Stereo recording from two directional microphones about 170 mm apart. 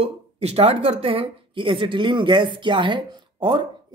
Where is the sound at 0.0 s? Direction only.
35° right (ahead or behind).